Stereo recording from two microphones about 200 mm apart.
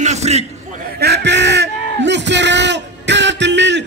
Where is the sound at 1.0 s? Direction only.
60° right (ahead or behind).